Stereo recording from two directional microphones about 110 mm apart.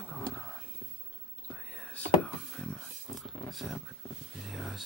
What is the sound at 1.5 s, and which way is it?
Whispering, 10° left (ahead or behind).